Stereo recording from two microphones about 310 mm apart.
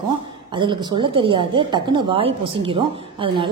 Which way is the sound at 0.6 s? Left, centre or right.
Centre.